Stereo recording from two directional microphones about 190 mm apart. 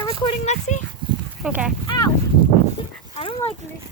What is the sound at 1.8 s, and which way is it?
Speech, 20° left (ahead or behind).